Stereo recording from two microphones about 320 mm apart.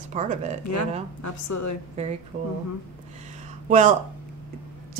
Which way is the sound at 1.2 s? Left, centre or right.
Left.